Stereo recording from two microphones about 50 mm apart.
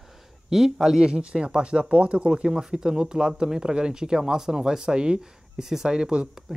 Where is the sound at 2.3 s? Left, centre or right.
Centre.